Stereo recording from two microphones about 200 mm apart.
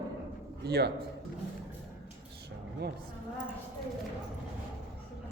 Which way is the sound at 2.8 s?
55° right (ahead or behind).